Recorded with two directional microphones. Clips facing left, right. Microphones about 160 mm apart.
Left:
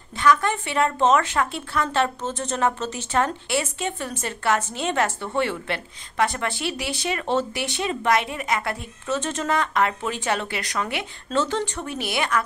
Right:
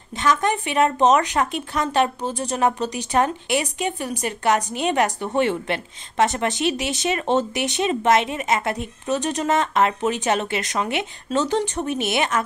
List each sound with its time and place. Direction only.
0.2 s speech: 20° right (ahead or behind)